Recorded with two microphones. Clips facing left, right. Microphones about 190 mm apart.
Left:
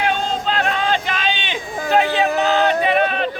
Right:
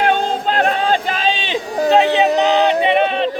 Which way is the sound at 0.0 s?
50° right (ahead or behind).